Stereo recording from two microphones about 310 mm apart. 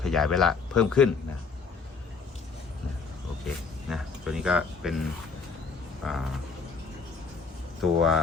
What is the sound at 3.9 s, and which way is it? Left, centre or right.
Speech, centre.